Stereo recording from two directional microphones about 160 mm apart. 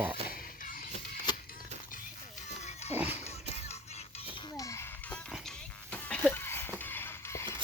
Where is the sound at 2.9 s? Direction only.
10° right (ahead or behind).